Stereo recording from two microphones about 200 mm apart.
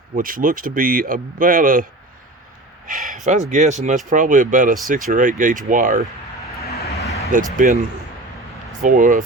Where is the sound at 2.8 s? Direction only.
40° right (ahead or behind).